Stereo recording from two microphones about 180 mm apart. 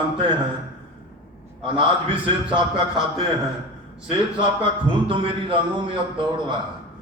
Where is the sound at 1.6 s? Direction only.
30° right (ahead or behind).